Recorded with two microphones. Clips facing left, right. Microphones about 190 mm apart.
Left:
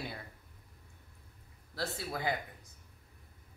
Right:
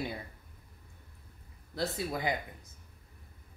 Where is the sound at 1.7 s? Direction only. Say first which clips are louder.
Right 4 dB; 20° right (ahead or behind).